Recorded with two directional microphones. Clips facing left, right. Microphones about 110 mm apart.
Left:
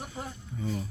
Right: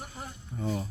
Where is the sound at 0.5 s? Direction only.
40° right (ahead or behind).